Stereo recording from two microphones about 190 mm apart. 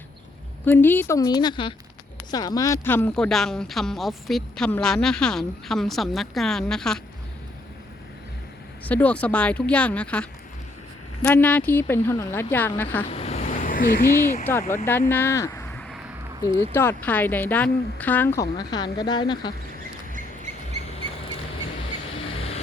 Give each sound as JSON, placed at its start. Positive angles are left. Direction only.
{"t": 0.6, "sound": "speech", "side_deg": 10}
{"t": 8.8, "sound": "speech", "side_deg": 10}
{"t": 13.1, "sound": "vehicle", "side_deg": 35}
{"t": 14.5, "sound": "speech", "side_deg": 10}
{"t": 22.3, "sound": "vehicle", "side_deg": 30}